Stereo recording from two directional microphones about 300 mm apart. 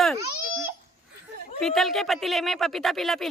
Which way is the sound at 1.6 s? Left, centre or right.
Centre.